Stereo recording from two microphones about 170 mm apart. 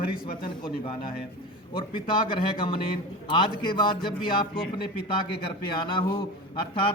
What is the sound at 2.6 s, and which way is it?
Speech, 30° left (ahead or behind).